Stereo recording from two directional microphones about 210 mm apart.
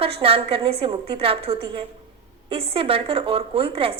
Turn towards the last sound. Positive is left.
turn(degrees=-25)  # may be behind; listen again after turning